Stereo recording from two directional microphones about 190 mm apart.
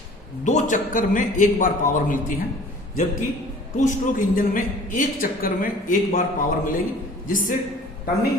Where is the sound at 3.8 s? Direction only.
45° left (ahead or behind).